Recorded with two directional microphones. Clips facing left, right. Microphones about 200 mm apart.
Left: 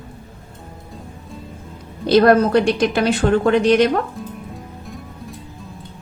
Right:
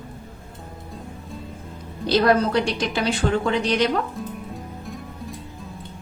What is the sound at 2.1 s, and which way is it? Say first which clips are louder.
A woman's voice: left 6 dB; 55° left (ahead or behind).